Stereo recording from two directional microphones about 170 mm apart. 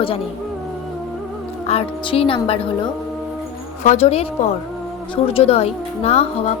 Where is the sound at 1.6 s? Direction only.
35° left (ahead or behind).